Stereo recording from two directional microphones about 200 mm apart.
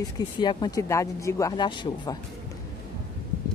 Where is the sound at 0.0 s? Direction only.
20° left (ahead or behind).